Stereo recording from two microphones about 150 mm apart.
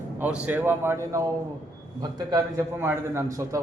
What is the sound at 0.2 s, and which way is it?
A man's voice, 10° right (ahead or behind).